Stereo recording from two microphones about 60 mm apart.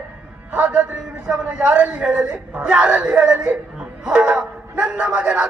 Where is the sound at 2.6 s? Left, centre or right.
Right.